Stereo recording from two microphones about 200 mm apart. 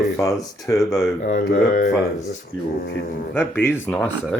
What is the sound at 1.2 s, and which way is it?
Speech, 45° left (ahead or behind).